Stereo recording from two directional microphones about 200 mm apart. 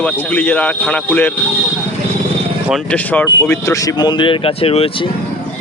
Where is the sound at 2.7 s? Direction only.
5° left (ahead or behind); by 5.1 s 30° left (ahead or behind).